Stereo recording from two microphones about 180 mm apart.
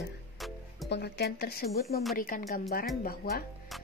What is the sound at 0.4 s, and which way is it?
Music, centre (ahead or behind).